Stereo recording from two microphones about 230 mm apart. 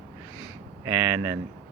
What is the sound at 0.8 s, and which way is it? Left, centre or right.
Speech, centre.